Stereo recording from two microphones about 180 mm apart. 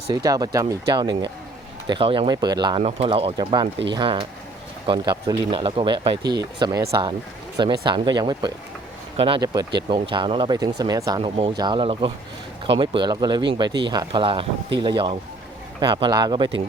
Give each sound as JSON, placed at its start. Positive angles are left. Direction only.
{"t": 0.1, "sound": "speech", "side_deg": -20}